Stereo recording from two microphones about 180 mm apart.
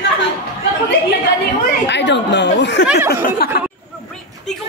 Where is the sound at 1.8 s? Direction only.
75° left (ahead or behind).